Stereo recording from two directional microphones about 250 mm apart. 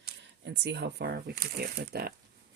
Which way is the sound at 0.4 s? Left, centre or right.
Right.